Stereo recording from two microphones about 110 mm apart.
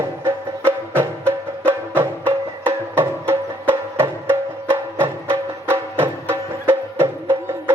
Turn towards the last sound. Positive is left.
turn(degrees=-25)  # may be behind; listen again after turning